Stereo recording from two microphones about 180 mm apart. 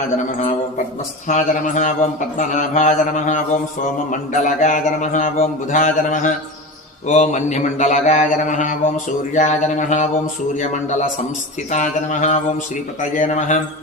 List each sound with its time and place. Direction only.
0.3 s a man's voice: 45° left (ahead or behind)
7.1 s mantra: 40° left (ahead or behind)
10.6 s a man's voice: 45° left (ahead or behind)
11.7 s mantra: 40° left (ahead or behind)